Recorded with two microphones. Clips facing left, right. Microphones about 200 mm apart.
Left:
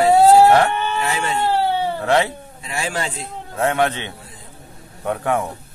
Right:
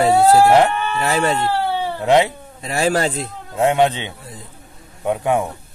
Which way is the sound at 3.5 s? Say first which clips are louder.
Right 3 dB; 15° right (ahead or behind).